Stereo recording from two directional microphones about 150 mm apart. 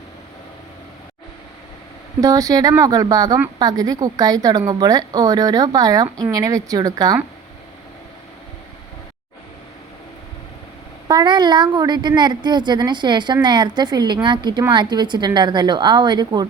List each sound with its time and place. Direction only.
2.2 s a woman's voice: 25° right (ahead or behind)
11.1 s a woman's voice: 30° right (ahead or behind)